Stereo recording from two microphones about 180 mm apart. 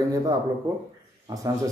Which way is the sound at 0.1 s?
20° right (ahead or behind).